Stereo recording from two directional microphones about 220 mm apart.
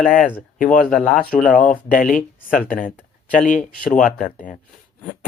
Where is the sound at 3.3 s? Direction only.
35° left (ahead or behind).